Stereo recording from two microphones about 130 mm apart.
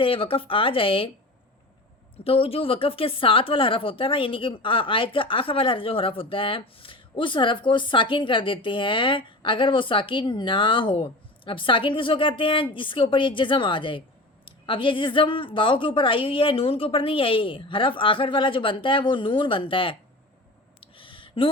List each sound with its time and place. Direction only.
0.0 s speech: 45° left (ahead or behind)
2.1 s speech: 45° left (ahead or behind)
20.8 s a sound: 40° left (ahead or behind)